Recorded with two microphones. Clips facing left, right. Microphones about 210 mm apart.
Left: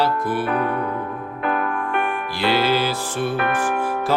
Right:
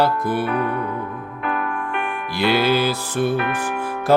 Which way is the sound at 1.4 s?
40° left (ahead or behind).